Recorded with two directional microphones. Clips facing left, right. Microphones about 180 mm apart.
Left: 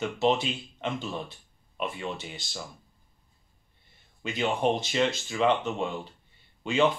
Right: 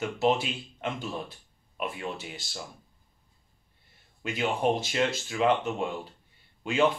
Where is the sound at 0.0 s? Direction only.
5° right (ahead or behind).